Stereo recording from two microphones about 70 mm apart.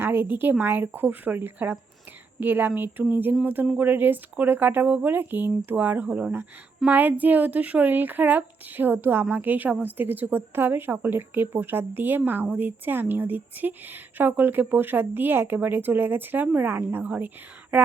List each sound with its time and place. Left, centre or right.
0.0 s speech: right